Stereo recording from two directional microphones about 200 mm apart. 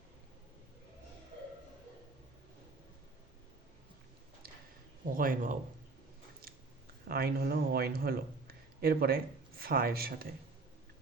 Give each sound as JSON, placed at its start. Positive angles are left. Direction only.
{"t": 5.1, "sound": "a man's voice", "side_deg": -45}
{"t": 7.1, "sound": "speech", "side_deg": -50}